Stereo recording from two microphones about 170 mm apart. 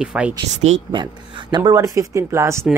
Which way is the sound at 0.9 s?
25° right (ahead or behind).